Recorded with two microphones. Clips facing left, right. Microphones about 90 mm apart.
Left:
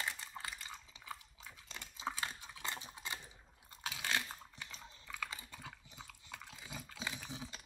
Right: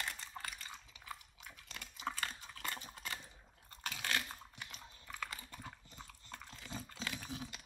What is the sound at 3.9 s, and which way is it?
Crunch, 15° left (ahead or behind).